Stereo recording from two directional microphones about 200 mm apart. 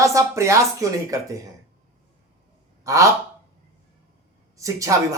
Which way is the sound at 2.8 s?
15° right (ahead or behind).